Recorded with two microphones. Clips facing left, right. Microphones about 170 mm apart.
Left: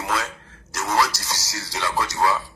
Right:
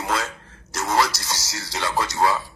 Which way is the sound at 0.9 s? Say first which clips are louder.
Right 1 dB; 20° right (ahead or behind).